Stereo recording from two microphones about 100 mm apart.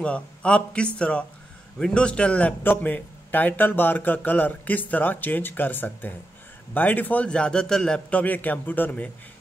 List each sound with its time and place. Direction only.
0.0 s a man's voice: 10° left (ahead or behind)